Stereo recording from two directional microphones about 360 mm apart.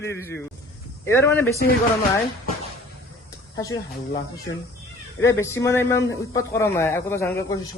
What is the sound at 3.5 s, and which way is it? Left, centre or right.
Speech, centre.